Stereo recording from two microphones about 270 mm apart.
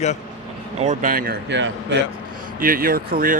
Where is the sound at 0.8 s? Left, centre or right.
Right.